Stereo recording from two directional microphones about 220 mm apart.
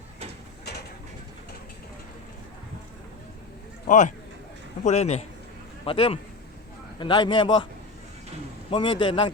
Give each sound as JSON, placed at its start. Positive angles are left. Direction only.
{"t": 3.8, "sound": "a man's voice", "side_deg": 35}
{"t": 8.7, "sound": "a man's voice", "side_deg": 20}